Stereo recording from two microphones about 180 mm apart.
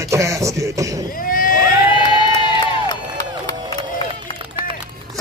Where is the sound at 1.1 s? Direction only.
50° left (ahead or behind).